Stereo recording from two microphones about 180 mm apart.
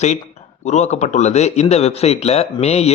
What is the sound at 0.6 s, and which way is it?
A man's voice, 40° left (ahead or behind).